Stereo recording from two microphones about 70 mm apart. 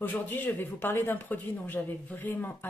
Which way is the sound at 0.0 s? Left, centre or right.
Left.